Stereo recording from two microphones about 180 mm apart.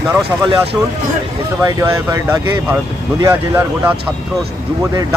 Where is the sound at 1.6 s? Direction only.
15° right (ahead or behind).